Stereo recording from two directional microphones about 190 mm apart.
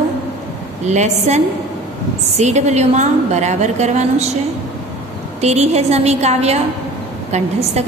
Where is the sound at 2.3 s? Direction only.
35° right (ahead or behind).